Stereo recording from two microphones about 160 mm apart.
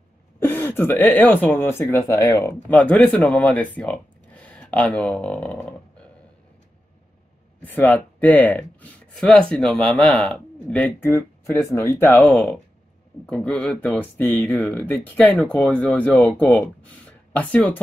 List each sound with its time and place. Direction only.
0.4 s speech: 10° left (ahead or behind)
7.6 s speech: 10° left (ahead or behind)
11.7 s speech: 20° left (ahead or behind)
12.3 s speech: 5° left (ahead or behind)